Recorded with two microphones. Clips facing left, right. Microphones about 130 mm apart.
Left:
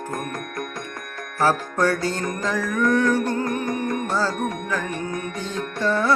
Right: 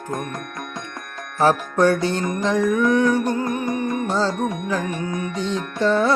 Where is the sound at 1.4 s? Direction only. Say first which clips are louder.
Right 4 dB; 20° right (ahead or behind).